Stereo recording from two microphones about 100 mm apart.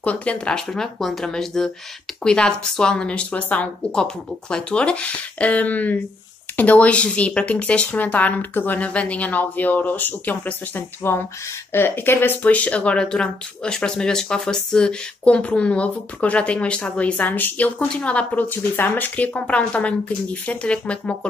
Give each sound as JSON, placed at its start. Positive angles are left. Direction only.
{"t": 0.0, "sound": "speech", "side_deg": 15}